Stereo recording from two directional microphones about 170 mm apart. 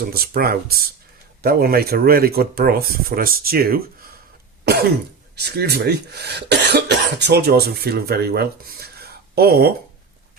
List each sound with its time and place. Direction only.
0.1 s speech: 60° right (ahead or behind)
4.6 s cough: 70° right (ahead or behind)
5.4 s speech: 70° right (ahead or behind)